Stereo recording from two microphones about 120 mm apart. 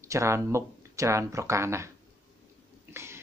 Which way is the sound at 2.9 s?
20° right (ahead or behind).